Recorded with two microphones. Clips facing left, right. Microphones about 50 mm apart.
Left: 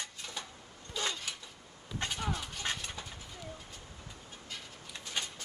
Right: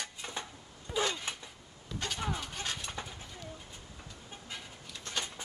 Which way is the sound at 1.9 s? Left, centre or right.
Centre.